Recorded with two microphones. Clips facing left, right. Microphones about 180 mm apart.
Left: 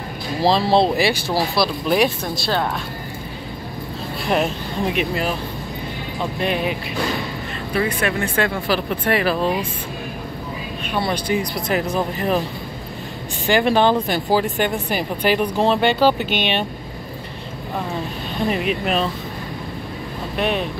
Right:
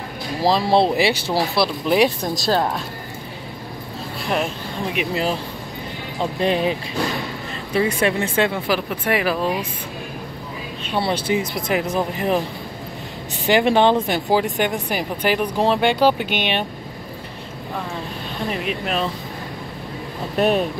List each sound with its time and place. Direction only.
0.4 s speech: 10° right (ahead or behind)
2.3 s a woman's voice: 40° right (ahead or behind)
4.3 s speech: 5° left (ahead or behind)
5.1 s speech: 25° right (ahead or behind)
6.4 s speech: 30° right (ahead or behind)
7.7 s speech: 25° right (ahead or behind)
10.8 s speech: 25° right (ahead or behind)
13.5 s speech: 20° right (ahead or behind)
18.5 s speech: centre (ahead or behind)
20.3 s speech: 40° right (ahead or behind)